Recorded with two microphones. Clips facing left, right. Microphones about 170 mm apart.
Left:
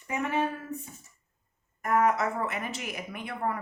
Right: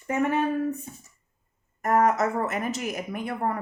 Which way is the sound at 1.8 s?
40° right (ahead or behind).